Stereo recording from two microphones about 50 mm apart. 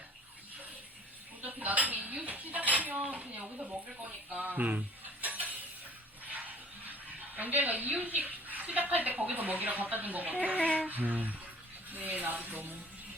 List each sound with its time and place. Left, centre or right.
1.4 s dishes: right
4.3 s speech: right
5.2 s a sound: right
9.3 s speech: right